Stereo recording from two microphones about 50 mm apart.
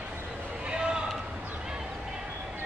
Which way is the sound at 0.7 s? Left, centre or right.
Centre.